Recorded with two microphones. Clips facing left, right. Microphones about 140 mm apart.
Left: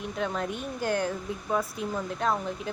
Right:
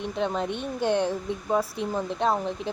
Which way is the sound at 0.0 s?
25° right (ahead or behind).